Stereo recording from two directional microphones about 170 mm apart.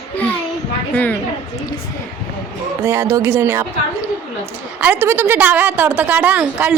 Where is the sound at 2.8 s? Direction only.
15° right (ahead or behind).